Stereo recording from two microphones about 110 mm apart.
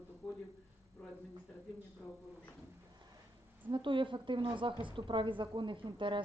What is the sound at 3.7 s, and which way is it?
A woman's voice, 50° right (ahead or behind).